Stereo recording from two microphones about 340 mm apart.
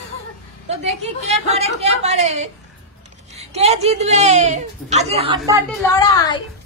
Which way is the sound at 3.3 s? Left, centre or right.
Centre.